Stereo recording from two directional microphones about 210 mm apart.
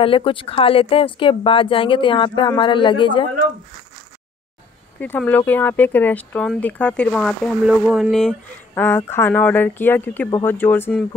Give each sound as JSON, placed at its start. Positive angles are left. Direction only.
{"t": 0.0, "sound": "speech", "side_deg": 25}
{"t": 5.0, "sound": "speech", "side_deg": 10}